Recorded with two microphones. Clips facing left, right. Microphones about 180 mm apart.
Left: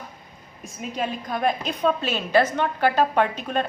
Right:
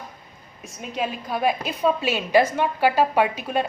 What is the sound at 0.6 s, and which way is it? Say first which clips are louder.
A woman's voice: even; centre (ahead or behind).